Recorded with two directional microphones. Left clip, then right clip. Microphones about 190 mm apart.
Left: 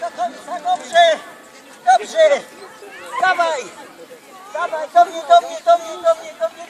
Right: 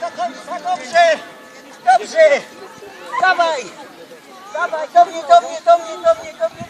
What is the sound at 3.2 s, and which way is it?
Speech, 5° left (ahead or behind).